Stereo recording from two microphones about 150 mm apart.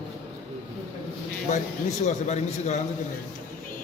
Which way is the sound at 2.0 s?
50° left (ahead or behind).